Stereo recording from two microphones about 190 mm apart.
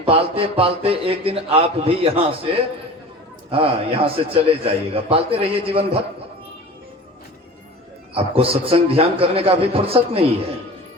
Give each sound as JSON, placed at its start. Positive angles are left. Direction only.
{"t": 0.0, "sound": "a man's voice", "side_deg": -30}
{"t": 3.5, "sound": "a man's voice", "side_deg": -30}
{"t": 8.1, "sound": "a man's voice", "side_deg": -30}